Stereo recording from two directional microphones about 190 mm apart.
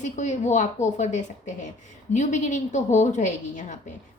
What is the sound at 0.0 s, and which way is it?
A woman's voice, 40° left (ahead or behind).